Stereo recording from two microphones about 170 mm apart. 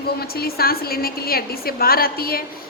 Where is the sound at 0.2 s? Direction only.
65° left (ahead or behind).